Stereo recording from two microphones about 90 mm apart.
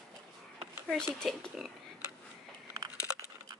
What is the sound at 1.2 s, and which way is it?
Speech, 5° left (ahead or behind).